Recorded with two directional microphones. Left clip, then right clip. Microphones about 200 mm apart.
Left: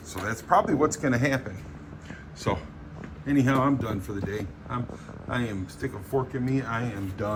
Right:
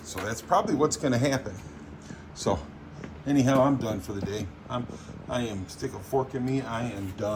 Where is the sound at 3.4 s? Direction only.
25° right (ahead or behind).